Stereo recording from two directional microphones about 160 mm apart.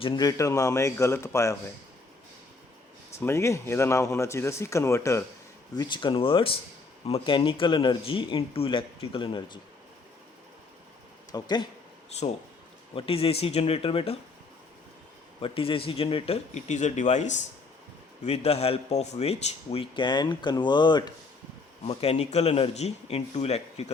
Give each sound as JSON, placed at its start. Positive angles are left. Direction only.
{"t": 0.0, "sound": "speech", "side_deg": 25}
{"t": 3.2, "sound": "speech", "side_deg": 15}
{"t": 11.3, "sound": "speech", "side_deg": 25}
{"t": 12.9, "sound": "speech", "side_deg": 35}
{"t": 15.4, "sound": "speech", "side_deg": 35}
{"t": 21.8, "sound": "speech", "side_deg": 40}